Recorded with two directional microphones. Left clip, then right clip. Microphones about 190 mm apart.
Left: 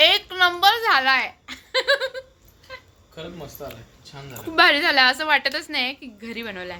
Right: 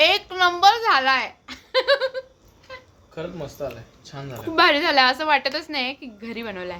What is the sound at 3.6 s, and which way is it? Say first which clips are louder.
Laughter: right 6 dB; 50° right (ahead or behind).